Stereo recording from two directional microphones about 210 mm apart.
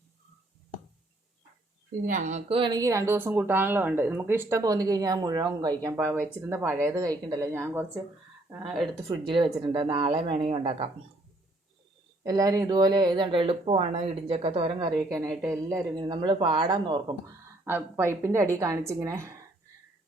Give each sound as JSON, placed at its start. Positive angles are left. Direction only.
{"t": 2.0, "sound": "a woman's voice", "side_deg": -35}
{"t": 9.3, "sound": "speech", "side_deg": -25}
{"t": 12.2, "sound": "a woman's voice", "side_deg": -15}